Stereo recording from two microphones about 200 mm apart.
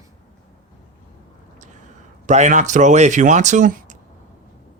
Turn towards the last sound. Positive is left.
turn(degrees=-40)  # may be behind; listen again after turning